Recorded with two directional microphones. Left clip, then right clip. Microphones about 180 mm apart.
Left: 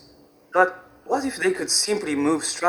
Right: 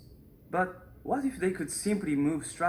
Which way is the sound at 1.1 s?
25° left (ahead or behind).